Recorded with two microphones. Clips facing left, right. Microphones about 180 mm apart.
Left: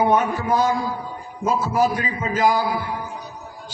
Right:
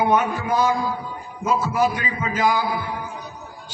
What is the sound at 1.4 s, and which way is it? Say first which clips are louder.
A man's voice: left 1 dB; 35° left (ahead or behind).